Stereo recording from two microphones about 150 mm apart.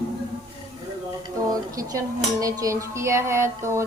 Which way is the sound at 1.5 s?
20° right (ahead or behind).